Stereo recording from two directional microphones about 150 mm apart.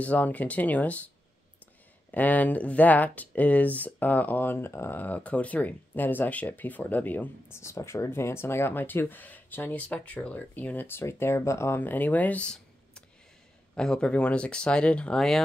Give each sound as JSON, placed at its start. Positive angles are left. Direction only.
{"t": 0.0, "sound": "speech", "side_deg": 10}
{"t": 2.0, "sound": "speech", "side_deg": 10}